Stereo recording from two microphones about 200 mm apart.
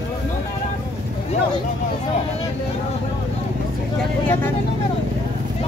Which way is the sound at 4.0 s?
10° left (ahead or behind).